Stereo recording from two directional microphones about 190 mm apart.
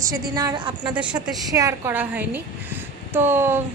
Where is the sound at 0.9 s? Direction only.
5° right (ahead or behind).